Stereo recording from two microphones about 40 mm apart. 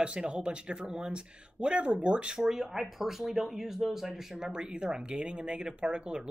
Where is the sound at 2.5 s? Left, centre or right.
Centre.